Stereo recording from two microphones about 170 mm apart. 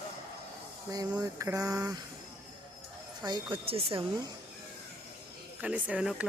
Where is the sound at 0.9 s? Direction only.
20° right (ahead or behind).